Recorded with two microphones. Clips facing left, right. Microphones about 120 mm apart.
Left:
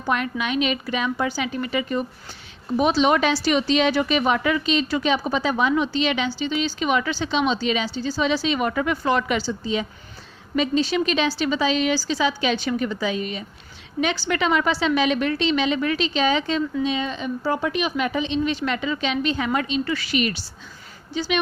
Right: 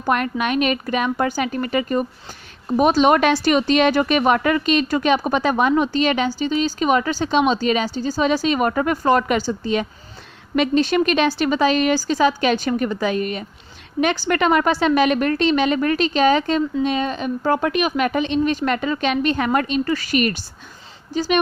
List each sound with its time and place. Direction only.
0.0 s speech: 55° right (ahead or behind)